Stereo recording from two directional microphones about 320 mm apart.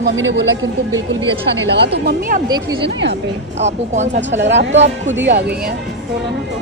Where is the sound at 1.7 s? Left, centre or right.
Right.